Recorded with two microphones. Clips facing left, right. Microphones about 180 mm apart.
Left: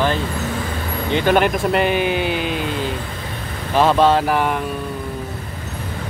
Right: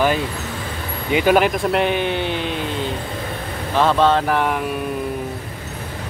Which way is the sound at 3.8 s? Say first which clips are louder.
Left 2 dB; 10° left (ahead or behind).